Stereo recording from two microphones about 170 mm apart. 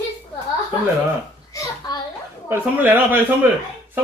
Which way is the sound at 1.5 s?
20° left (ahead or behind).